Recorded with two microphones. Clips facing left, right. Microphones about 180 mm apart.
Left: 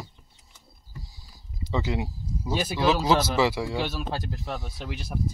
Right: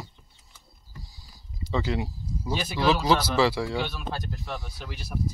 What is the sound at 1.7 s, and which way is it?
Speech, 20° left (ahead or behind).